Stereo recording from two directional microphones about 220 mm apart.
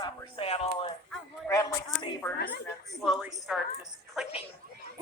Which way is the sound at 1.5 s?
15° left (ahead or behind).